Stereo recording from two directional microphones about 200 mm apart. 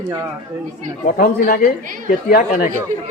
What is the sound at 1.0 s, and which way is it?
Speech, 45° left (ahead or behind).